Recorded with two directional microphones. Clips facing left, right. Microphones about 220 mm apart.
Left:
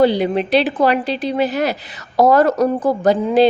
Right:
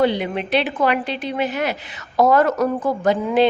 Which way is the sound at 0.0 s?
35° left (ahead or behind).